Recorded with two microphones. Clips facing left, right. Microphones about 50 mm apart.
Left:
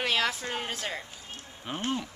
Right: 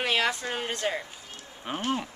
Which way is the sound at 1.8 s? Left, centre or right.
Right.